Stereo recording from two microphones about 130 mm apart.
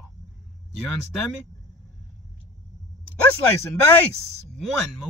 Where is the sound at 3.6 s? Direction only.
20° left (ahead or behind).